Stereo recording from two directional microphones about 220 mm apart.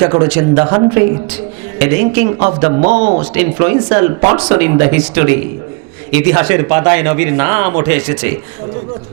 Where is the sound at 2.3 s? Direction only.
25° right (ahead or behind).